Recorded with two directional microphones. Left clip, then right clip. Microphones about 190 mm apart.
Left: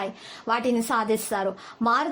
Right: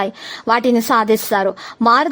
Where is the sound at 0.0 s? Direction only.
40° right (ahead or behind).